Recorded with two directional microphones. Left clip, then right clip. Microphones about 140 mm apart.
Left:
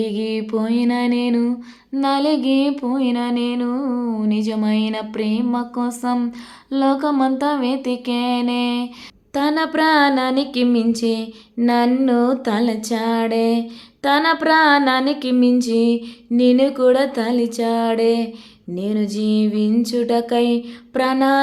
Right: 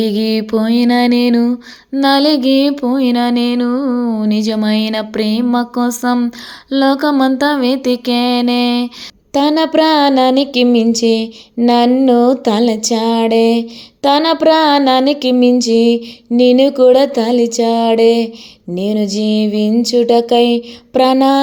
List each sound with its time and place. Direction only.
0.0 s music: 45° right (ahead or behind)
2.0 s mantra: 40° right (ahead or behind)
9.3 s speech: 30° right (ahead or behind)